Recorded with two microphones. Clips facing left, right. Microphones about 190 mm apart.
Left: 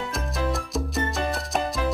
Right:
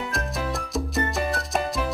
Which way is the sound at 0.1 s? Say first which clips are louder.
Left 1 dB; centre (ahead or behind).